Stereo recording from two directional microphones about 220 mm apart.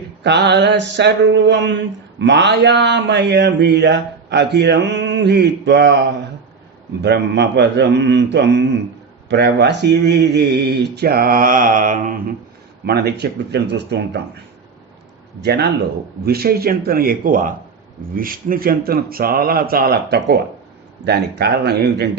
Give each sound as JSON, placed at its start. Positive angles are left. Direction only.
{"t": 0.2, "sound": "mantra", "side_deg": -50}
{"t": 15.4, "sound": "mantra", "side_deg": -50}